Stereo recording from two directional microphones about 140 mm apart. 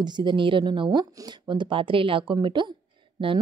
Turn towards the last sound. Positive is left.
turn(degrees=-35)  # may be behind; listen again after turning